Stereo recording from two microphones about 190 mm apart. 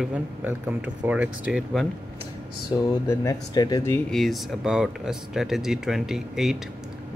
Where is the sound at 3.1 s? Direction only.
20° left (ahead or behind).